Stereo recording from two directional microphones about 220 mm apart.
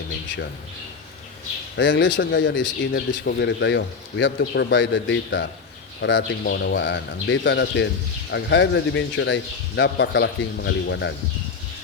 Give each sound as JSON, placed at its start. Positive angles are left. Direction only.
{"t": 1.7, "sound": "speech", "side_deg": 55}